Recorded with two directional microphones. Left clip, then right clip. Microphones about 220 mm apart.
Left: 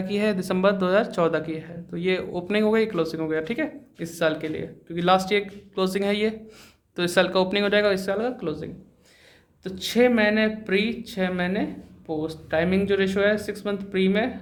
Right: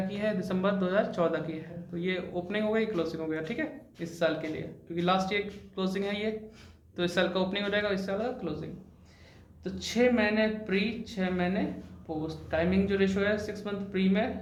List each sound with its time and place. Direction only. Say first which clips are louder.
0.1 s speech: left 12 dB; 50° left (ahead or behind)